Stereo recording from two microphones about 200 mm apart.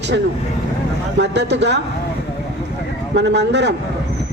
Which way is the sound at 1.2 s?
60° right (ahead or behind).